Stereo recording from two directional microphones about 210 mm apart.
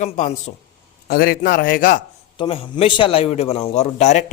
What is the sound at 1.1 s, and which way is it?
Speech, 45° left (ahead or behind).